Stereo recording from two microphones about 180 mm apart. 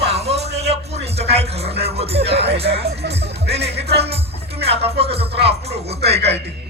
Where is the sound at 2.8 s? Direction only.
65° right (ahead or behind).